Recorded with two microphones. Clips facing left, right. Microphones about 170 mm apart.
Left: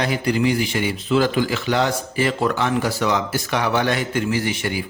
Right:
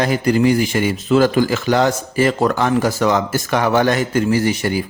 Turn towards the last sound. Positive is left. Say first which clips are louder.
# right 6 dB
turn(degrees=-40)  # may be behind; listen again after turning